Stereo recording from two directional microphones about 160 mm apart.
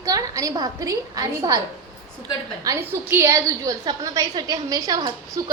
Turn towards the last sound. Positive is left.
turn(degrees=-20)  # may be behind; listen again after turning